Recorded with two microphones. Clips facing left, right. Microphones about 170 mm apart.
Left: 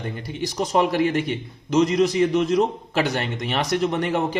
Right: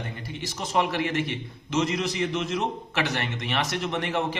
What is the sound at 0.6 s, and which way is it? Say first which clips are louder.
A man's voice: left 6 dB; 40° left (ahead or behind).